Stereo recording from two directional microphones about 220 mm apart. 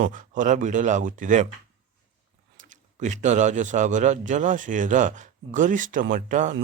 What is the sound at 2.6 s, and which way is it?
A man's voice, 35° right (ahead or behind).